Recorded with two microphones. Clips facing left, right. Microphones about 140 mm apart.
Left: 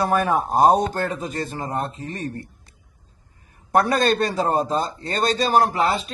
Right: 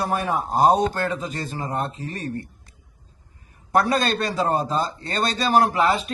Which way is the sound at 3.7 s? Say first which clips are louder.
Left 2 dB; 50° left (ahead or behind).